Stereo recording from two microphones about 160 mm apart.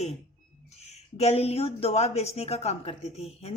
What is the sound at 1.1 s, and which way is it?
Speech, 40° left (ahead or behind).